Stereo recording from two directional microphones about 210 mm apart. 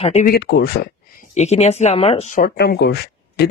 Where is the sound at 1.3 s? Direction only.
35° left (ahead or behind).